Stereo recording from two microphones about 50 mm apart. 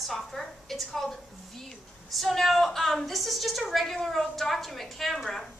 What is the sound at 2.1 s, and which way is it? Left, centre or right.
A woman's voice, centre.